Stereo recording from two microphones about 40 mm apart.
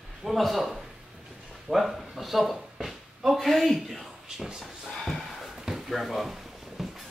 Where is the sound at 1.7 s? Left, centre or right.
Centre.